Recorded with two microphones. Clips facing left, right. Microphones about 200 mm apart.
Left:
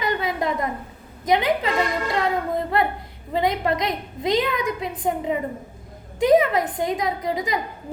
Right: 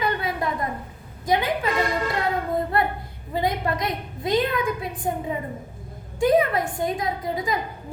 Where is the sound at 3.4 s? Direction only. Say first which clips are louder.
Left 2 dB; 20° left (ahead or behind).